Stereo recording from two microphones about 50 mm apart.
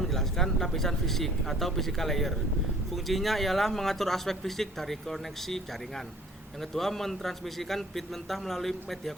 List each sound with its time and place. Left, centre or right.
0.0 s speech: centre